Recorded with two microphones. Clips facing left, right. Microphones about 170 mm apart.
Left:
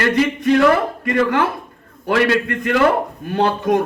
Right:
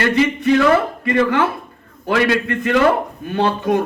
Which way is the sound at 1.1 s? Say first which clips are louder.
Right 1 dB; 55° left (ahead or behind).